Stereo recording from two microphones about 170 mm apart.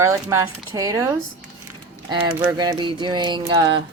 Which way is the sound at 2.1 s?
25° right (ahead or behind).